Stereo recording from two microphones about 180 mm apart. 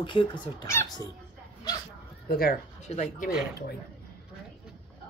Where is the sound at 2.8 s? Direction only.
40° left (ahead or behind).